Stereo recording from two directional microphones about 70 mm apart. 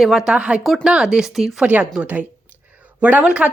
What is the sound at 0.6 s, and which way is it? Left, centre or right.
Speech, centre.